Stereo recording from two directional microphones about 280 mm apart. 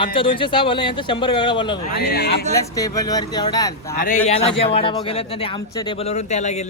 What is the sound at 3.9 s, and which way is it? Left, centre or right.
Speech, left.